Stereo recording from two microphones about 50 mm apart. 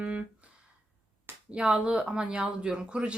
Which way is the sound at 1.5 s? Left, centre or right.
Right.